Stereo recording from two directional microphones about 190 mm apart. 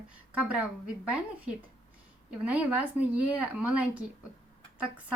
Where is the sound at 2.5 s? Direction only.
10° right (ahead or behind).